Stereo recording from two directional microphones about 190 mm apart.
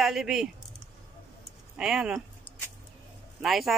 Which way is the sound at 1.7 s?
5° right (ahead or behind).